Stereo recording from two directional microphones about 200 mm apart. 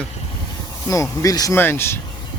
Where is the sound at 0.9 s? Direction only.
15° left (ahead or behind).